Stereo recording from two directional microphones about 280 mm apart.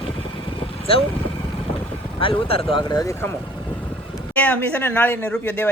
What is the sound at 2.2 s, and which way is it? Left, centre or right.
Speech, centre.